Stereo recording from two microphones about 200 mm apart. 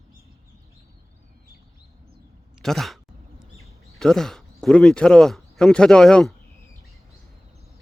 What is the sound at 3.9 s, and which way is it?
Speech, centre (ahead or behind).